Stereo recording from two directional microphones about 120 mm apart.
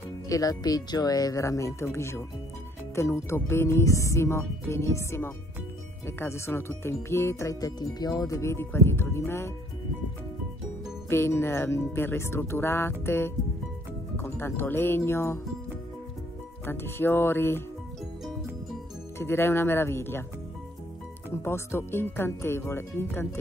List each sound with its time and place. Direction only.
0.3 s speech: 30° left (ahead or behind)
11.1 s speech: 20° left (ahead or behind)
16.6 s speech: 20° left (ahead or behind)
19.1 s speech: 20° left (ahead or behind)
21.3 s speech: 20° left (ahead or behind)